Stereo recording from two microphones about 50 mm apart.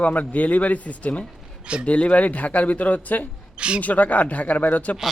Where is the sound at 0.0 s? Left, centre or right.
Left.